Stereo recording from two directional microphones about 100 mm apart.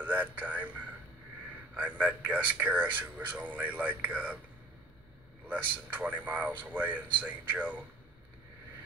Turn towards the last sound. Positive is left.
turn(degrees=-15)  # may be behind; listen again after turning